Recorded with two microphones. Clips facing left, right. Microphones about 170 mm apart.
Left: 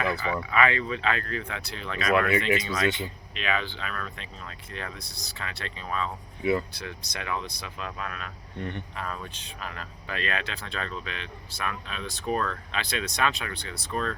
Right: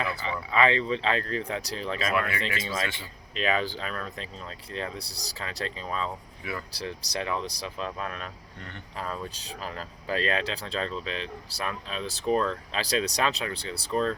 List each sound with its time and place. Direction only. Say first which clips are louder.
0.0 s speech: left 3 dB; 30° right (ahead or behind)
2.8 s speech: left 8 dB; 20° left (ahead or behind)
3.3 s speech: right 4 dB; 35° right (ahead or behind)
6.4 s speech: left 11 dB; 25° left (ahead or behind)
6.7 s speech: right 3 dB; 35° right (ahead or behind)